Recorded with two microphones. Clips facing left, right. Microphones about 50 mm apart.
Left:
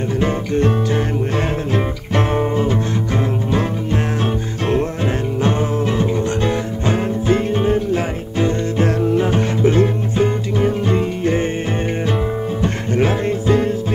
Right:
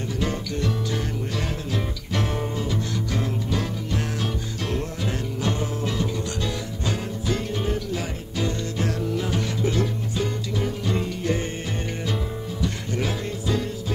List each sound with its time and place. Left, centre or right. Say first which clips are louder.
0.2 s music: left 10 dB; left
5.4 s music: left 8 dB; left
12.6 s music: left 9 dB; left